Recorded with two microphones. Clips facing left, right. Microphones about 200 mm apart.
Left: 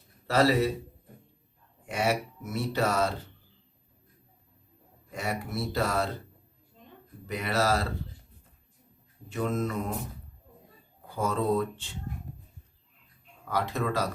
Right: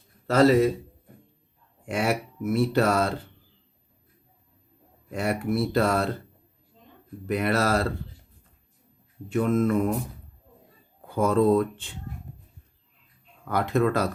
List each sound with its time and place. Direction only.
0.3 s mantra: 45° right (ahead or behind)
2.0 s speech: 55° right (ahead or behind)
5.1 s speech: 55° right (ahead or behind)
7.3 s speech: 60° right (ahead or behind)
9.3 s mantra: 55° right (ahead or behind)
11.1 s speech: 55° right (ahead or behind)
13.5 s speech: 55° right (ahead or behind)